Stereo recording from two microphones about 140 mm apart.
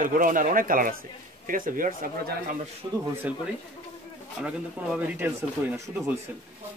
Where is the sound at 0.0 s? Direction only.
75° right (ahead or behind).